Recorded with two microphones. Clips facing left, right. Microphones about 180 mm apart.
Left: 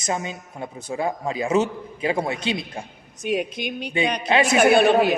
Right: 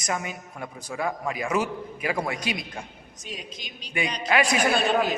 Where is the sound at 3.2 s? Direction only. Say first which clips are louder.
Left 15 dB; 60° left (ahead or behind).